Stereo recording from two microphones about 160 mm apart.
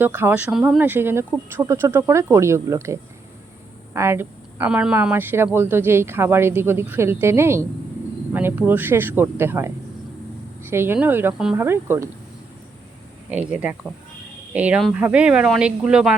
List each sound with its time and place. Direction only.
0.0 s a woman's voice: 15° right (ahead or behind)
13.3 s a woman's voice: 10° right (ahead or behind)